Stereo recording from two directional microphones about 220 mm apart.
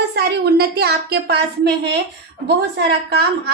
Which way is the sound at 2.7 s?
50° right (ahead or behind).